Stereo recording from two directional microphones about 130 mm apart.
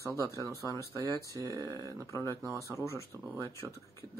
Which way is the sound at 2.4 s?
25° right (ahead or behind).